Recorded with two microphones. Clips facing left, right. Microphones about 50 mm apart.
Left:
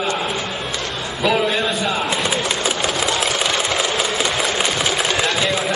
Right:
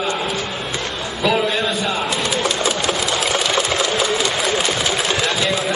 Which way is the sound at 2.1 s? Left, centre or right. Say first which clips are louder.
Even; centre.